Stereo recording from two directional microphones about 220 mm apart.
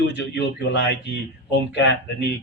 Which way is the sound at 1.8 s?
50° left (ahead or behind).